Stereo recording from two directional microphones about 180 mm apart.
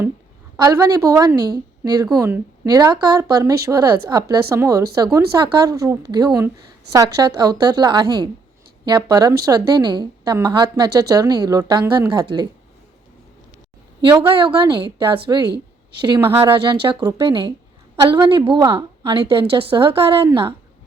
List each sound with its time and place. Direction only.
0.5 s a woman's voice: 20° right (ahead or behind)
14.0 s a woman's voice: 25° right (ahead or behind)
15.4 s a sound: 65° right (ahead or behind)
16.0 s a woman's voice: 25° right (ahead or behind)